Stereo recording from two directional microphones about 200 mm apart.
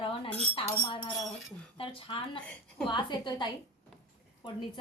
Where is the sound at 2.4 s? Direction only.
5° left (ahead or behind).